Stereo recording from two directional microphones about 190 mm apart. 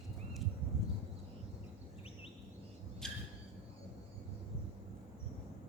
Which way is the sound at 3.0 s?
Centre (ahead or behind).